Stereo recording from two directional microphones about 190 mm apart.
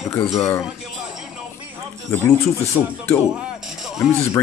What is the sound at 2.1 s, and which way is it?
Speech, 15° left (ahead or behind).